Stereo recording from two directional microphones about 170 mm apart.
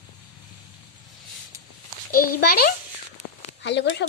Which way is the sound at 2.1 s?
65° left (ahead or behind).